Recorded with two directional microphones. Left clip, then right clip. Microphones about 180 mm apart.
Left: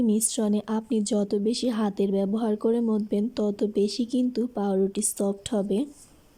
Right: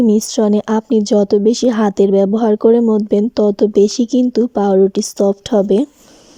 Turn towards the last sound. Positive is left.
turn(degrees=-35)  # may be behind; listen again after turning